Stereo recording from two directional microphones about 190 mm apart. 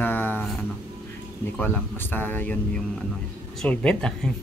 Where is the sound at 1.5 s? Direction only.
10° left (ahead or behind).